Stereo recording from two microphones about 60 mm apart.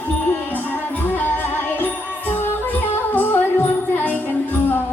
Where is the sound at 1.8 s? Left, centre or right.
Left.